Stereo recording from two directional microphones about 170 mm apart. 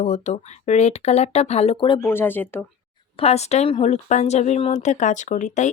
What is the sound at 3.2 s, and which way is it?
Speech, 40° left (ahead or behind).